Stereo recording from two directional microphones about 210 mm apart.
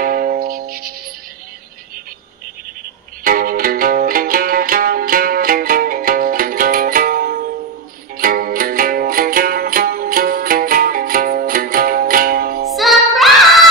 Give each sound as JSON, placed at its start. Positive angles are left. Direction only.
{"t": 0.0, "sound": "music", "side_deg": -45}
{"t": 3.3, "sound": "music", "side_deg": -45}
{"t": 12.7, "sound": "music", "side_deg": 0}